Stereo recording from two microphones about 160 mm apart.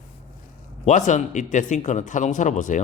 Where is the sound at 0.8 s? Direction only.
50° left (ahead or behind).